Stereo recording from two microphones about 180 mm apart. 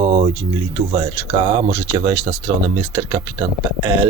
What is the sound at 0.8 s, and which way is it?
Speech, 35° right (ahead or behind).